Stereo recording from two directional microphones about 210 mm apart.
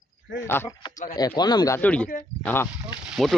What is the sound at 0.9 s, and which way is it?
Speech, 40° left (ahead or behind).